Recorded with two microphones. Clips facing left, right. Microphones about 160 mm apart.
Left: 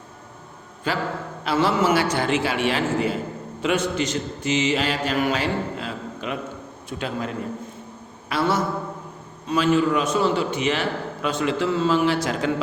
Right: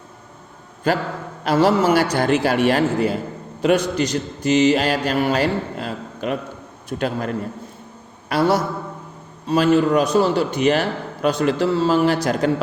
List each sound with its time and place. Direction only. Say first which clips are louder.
0.9 s a man's voice: right 5 dB; 45° right (ahead or behind)
8.3 s a man's voice: right 4 dB; 40° right (ahead or behind)